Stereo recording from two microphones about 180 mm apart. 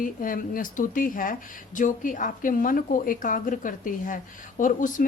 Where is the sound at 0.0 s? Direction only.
50° left (ahead or behind).